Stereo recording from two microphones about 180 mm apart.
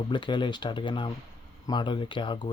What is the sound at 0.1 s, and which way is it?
Speech, 25° left (ahead or behind).